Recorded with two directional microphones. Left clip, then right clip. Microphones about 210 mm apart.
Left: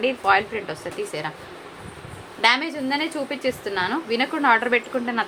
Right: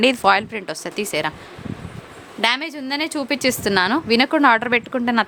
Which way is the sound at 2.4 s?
45° right (ahead or behind).